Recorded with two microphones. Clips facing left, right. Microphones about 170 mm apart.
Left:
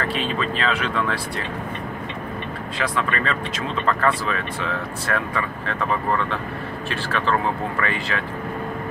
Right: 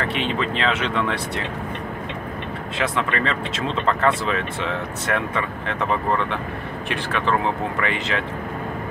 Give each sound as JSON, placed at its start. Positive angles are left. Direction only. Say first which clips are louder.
{"t": 0.0, "sound": "speech", "louder": "right 1 dB", "side_deg": -20}
{"t": 2.8, "sound": "speech", "louder": "right 1 dB", "side_deg": -25}